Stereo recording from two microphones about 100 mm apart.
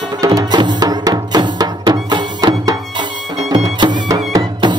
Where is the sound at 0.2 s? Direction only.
35° right (ahead or behind).